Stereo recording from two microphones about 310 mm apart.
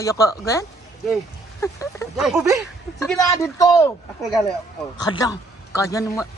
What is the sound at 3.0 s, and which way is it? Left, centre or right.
Speech, centre.